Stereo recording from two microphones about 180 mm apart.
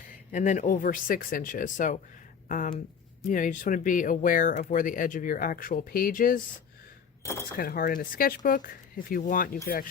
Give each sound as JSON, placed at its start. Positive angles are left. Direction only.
{"t": 0.3, "sound": "speech", "side_deg": 45}
{"t": 7.2, "sound": "speech", "side_deg": 15}
{"t": 7.6, "sound": "speech", "side_deg": 55}